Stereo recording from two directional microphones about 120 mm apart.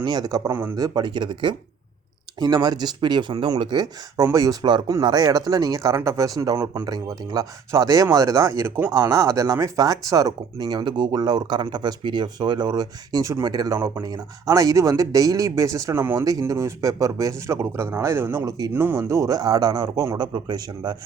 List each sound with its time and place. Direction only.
0.0 s speech: 35° right (ahead or behind)
13.7 s speech: 15° right (ahead or behind)
14.0 s speech: 30° right (ahead or behind)